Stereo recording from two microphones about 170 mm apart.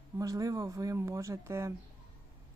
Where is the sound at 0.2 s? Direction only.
20° right (ahead or behind).